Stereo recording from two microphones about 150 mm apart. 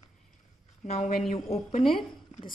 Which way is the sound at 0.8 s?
45° left (ahead or behind).